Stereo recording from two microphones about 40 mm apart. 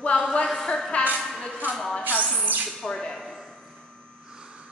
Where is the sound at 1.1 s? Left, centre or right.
Centre.